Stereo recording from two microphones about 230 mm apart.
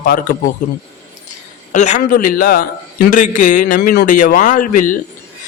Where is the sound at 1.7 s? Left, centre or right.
Left.